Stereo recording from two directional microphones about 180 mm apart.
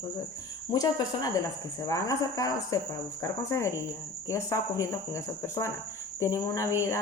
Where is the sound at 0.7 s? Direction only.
20° left (ahead or behind).